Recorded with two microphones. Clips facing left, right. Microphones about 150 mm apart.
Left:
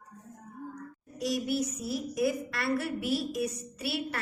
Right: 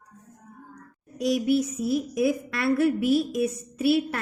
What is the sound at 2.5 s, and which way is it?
Speech, 55° right (ahead or behind).